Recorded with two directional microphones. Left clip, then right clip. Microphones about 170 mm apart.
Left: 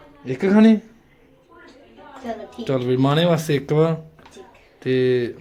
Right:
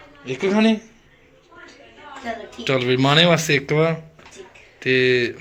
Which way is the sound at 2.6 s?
20° left (ahead or behind).